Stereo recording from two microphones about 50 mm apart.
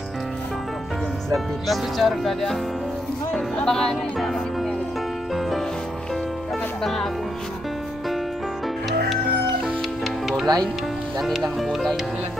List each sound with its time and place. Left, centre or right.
1.3 s speech: centre
4.2 s music: centre
6.8 s music: centre
9.8 s music: centre
11.4 s speech: centre